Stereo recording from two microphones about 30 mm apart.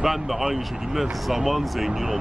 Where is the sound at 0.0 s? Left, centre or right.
Centre.